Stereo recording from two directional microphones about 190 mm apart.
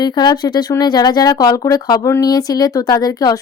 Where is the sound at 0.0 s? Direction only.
25° left (ahead or behind).